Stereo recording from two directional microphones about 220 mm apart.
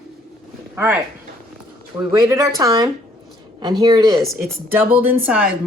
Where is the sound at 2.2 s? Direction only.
15° right (ahead or behind).